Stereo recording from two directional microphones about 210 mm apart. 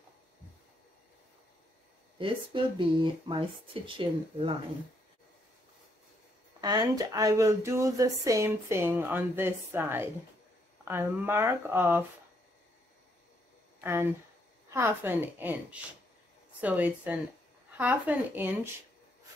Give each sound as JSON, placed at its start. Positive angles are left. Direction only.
{"t": 2.1, "sound": "speech", "side_deg": -25}
{"t": 6.6, "sound": "speech", "side_deg": -20}
{"t": 13.7, "sound": "a sound", "side_deg": -10}
{"t": 14.7, "sound": "speech", "side_deg": -10}